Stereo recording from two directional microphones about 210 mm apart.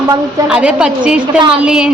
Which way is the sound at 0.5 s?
5° right (ahead or behind).